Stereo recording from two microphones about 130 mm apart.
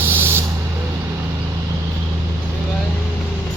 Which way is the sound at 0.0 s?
15° right (ahead or behind).